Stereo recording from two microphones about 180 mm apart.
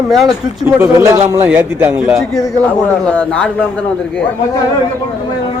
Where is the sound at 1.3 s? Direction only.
10° right (ahead or behind).